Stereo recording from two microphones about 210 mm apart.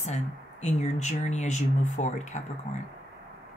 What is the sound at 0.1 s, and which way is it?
Speech, 35° left (ahead or behind).